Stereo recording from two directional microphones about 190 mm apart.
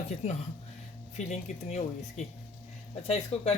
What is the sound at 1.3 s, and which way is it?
Speech, 40° left (ahead or behind).